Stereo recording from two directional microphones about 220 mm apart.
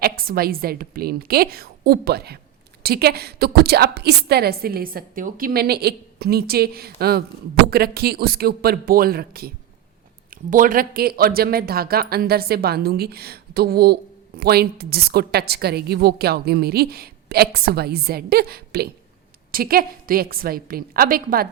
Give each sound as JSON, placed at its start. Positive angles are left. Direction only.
{"t": 0.0, "sound": "speech", "side_deg": -45}
{"t": 10.5, "sound": "a woman's voice", "side_deg": -40}